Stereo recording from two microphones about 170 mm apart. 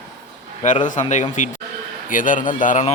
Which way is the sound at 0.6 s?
45° left (ahead or behind).